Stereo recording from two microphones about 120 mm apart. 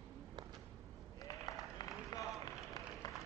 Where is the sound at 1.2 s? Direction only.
30° left (ahead or behind).